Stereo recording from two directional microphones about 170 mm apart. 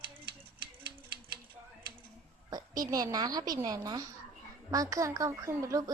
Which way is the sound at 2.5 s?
20° right (ahead or behind).